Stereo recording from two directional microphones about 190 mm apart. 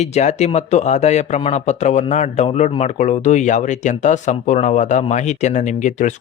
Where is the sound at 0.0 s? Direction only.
35° left (ahead or behind).